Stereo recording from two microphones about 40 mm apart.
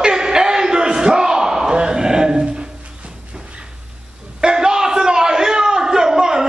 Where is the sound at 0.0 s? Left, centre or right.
Centre.